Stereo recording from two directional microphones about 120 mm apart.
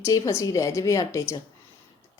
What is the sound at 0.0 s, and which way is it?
A woman's voice, 25° left (ahead or behind).